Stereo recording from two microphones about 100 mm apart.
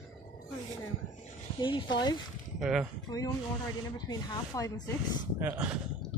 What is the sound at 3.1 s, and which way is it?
Speech, 40° left (ahead or behind).